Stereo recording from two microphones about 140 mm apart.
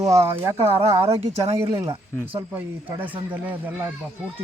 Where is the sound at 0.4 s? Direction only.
20° right (ahead or behind).